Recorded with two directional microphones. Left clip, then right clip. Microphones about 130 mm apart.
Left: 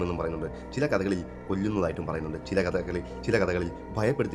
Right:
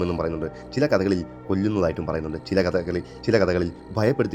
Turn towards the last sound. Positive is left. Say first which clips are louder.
# right 5 dB
turn(degrees=-25)  # may be behind; listen again after turning